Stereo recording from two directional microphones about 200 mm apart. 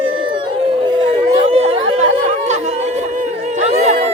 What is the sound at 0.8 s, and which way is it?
Chatter, 25° right (ahead or behind).